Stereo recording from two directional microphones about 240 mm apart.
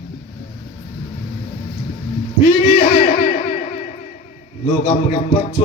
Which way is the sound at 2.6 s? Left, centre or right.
Left.